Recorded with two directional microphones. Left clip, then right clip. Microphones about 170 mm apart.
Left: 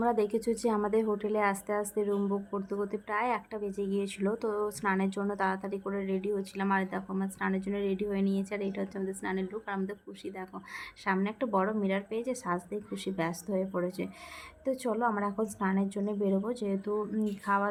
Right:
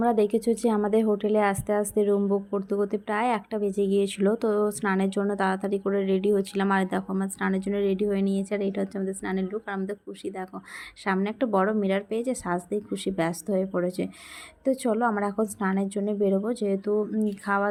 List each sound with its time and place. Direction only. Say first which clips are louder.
0.0 s a woman's voice: right 6 dB; 20° right (ahead or behind)